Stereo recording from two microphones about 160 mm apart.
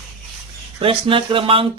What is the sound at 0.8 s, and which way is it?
Speech, 35° right (ahead or behind).